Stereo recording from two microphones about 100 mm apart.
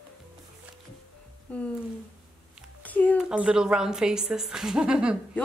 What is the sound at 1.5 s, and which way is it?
Speech, 15° left (ahead or behind).